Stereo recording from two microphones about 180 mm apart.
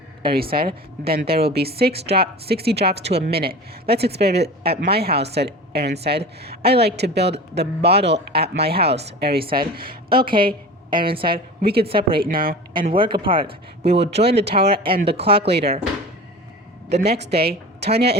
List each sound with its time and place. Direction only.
0.3 s speech: 55° right (ahead or behind)
10.2 s speech: 30° right (ahead or behind)
11.6 s speech: 60° right (ahead or behind)
11.9 s speech: 30° right (ahead or behind)
12.2 s speech: 55° right (ahead or behind)
12.8 s speech: 30° right (ahead or behind)
14.3 s speech: 65° right (ahead or behind)
15.1 s speech: 30° right (ahead or behind)
15.4 s speech: 65° right (ahead or behind)
16.9 s speech: 65° right (ahead or behind)